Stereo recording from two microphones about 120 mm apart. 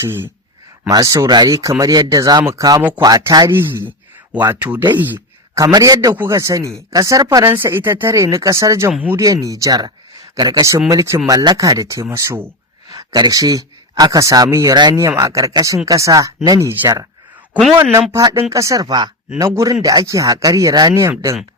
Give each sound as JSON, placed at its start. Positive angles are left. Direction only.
{"t": 0.0, "sound": "speech", "side_deg": -20}
{"t": 0.9, "sound": "speech", "side_deg": -30}
{"t": 3.5, "sound": "a sound", "side_deg": -20}
{"t": 5.5, "sound": "speech", "side_deg": -25}
{"t": 18.1, "sound": "speech", "side_deg": -35}